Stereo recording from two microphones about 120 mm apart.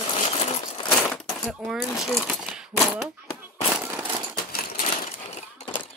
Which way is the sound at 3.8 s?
20° right (ahead or behind).